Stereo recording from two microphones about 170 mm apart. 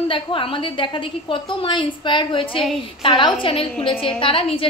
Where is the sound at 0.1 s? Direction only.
30° left (ahead or behind).